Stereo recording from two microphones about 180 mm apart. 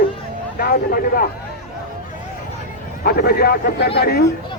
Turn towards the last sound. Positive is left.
turn(degrees=60)  # may be behind; listen again after turning